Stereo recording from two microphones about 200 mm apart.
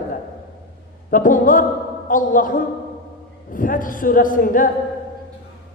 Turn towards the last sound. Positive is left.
turn(degrees=40)  # may be behind; listen again after turning